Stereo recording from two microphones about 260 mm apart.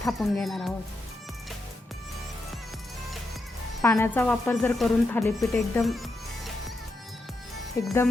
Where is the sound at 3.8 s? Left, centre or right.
Centre.